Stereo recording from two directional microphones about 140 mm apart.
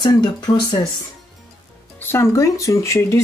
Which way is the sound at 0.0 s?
30° left (ahead or behind).